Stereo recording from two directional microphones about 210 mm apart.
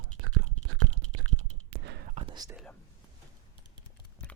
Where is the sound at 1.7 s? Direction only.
55° right (ahead or behind).